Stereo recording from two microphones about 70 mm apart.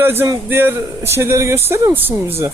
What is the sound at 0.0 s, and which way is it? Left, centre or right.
Speech, right.